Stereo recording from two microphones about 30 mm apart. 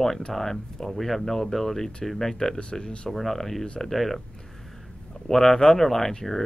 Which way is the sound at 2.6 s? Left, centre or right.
Left.